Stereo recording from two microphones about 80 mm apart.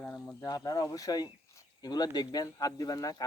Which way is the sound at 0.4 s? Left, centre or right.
Left.